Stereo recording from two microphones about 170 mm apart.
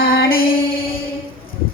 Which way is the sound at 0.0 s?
60° left (ahead or behind).